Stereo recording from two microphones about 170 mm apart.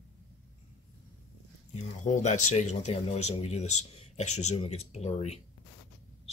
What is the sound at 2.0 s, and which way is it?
Speech, 45° left (ahead or behind).